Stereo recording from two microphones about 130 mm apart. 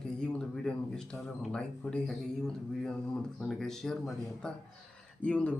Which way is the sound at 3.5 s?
5° left (ahead or behind).